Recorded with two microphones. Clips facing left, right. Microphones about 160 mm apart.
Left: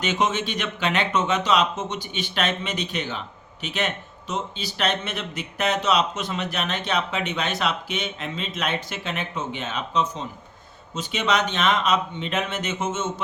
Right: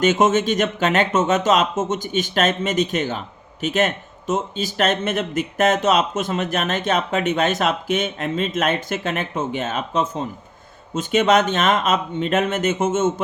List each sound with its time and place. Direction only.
0.0 s speech: 45° right (ahead or behind)